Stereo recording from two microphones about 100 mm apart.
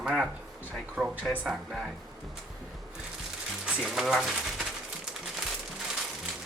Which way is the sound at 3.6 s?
5° right (ahead or behind).